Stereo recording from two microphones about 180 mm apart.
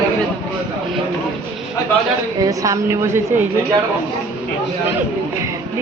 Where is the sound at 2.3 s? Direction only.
20° right (ahead or behind).